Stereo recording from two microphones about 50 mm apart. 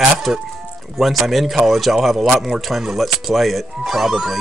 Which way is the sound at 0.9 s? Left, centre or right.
Centre.